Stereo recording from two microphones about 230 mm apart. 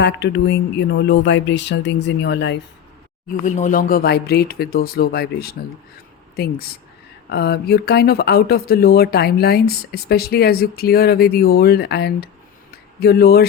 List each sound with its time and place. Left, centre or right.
0.0 s speech: left
3.4 s speech: left